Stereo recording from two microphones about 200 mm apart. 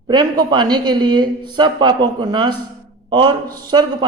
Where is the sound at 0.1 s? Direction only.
20° right (ahead or behind).